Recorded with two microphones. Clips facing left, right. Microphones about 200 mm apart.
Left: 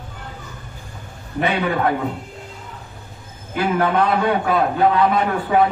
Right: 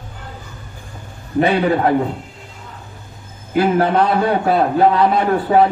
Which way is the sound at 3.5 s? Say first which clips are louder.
Right 4 dB; 35° right (ahead or behind).